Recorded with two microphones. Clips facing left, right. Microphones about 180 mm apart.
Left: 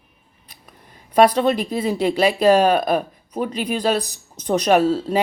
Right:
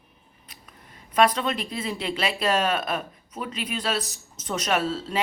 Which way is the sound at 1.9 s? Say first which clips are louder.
Left 10 dB; 40° left (ahead or behind).